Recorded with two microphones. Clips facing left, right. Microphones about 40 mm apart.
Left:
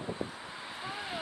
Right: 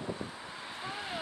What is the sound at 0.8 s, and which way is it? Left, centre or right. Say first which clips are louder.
Vehicle: even; centre.